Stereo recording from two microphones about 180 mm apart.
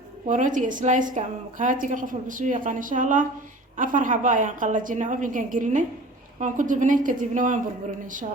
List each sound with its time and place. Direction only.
0.3 s a woman's voice: 45° right (ahead or behind)